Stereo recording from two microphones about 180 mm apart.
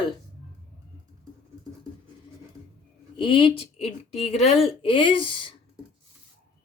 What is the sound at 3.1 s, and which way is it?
A woman's voice, 25° left (ahead or behind).